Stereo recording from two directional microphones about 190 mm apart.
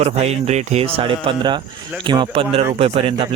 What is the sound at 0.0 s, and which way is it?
Speech, 35° right (ahead or behind).